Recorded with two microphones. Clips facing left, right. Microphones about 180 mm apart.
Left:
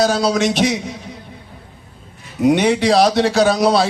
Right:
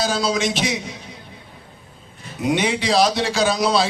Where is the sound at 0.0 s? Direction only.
60° left (ahead or behind).